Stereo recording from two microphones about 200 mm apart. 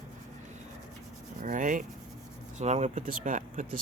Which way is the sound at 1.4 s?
40° right (ahead or behind).